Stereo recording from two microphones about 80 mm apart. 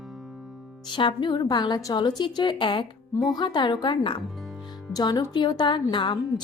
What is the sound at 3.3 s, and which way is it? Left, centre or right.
Speech, left.